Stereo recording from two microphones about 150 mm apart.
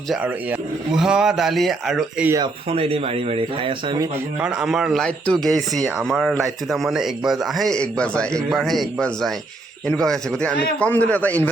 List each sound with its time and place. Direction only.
0.1 s a man's voice: 5° right (ahead or behind)
2.6 s speech: 40° right (ahead or behind)
4.4 s a man's voice: 5° right (ahead or behind); by 11.4 s 10° left (ahead or behind)